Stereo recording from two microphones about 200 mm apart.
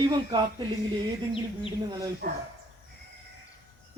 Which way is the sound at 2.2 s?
55° right (ahead or behind).